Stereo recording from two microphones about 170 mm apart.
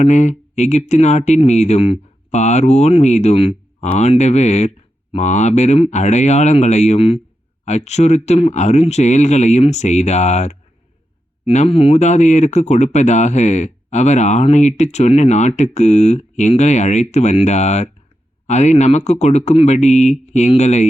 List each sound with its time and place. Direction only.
0.0 s speech: 45° left (ahead or behind)